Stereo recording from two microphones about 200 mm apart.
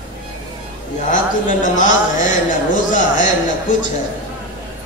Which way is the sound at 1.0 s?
40° left (ahead or behind).